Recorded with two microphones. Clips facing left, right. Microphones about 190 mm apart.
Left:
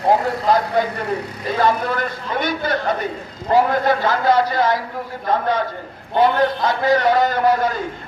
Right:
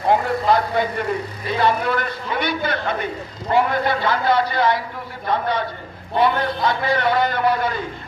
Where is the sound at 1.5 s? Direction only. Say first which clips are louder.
Left 1 dB; 40° left (ahead or behind).